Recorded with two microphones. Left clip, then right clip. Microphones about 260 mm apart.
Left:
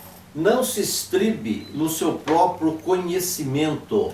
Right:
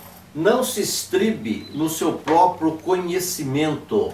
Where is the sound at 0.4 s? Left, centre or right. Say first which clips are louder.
Right 1 dB; centre.